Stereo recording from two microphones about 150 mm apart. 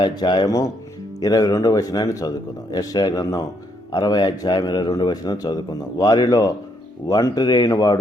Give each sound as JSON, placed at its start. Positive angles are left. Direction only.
{"t": 0.0, "sound": "a man's voice", "side_deg": 30}